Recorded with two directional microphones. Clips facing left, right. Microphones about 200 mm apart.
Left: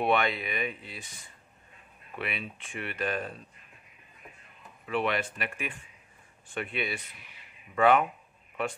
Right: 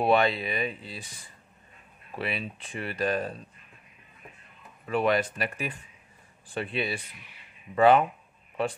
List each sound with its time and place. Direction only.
0.0 s speech: 35° right (ahead or behind)
4.8 s speech: 40° right (ahead or behind)